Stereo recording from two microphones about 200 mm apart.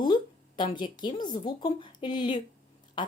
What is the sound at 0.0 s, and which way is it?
Speech, 20° left (ahead or behind).